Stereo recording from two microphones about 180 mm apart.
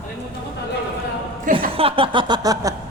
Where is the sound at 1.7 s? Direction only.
30° right (ahead or behind).